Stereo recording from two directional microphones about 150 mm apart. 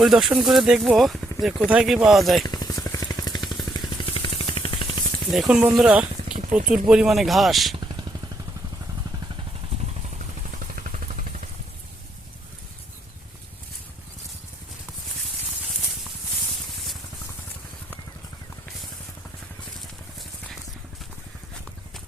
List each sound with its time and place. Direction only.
0.0 s speech: 5° right (ahead or behind)
2.4 s vehicle: 25° left (ahead or behind)
5.3 s speech: 5° right (ahead or behind)
10.5 s a sound: 55° right (ahead or behind)